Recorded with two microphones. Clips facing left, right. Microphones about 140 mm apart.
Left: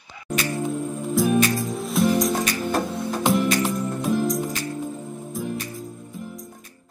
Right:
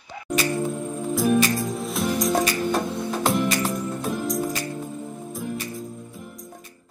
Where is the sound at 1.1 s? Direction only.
Centre (ahead or behind).